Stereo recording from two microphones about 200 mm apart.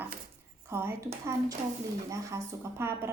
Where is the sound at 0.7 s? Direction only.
10° right (ahead or behind).